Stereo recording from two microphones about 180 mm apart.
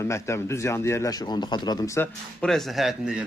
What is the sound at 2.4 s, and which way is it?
Speech, centre (ahead or behind).